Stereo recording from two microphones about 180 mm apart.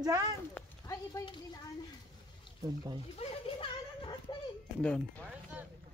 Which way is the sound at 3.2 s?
35° left (ahead or behind).